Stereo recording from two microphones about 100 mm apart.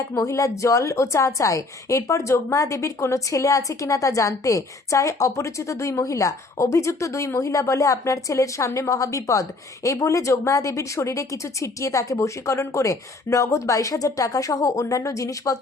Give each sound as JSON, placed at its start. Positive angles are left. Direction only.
{"t": 0.2, "sound": "a woman's voice", "side_deg": 30}